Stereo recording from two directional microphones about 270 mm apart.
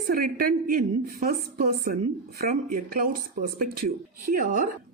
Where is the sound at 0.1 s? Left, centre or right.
Right.